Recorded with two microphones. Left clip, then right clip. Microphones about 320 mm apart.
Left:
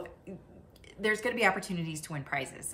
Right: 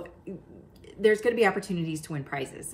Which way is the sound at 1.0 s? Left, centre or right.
Centre.